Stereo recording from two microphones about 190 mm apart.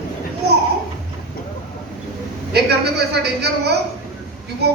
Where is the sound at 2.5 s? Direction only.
60° right (ahead or behind).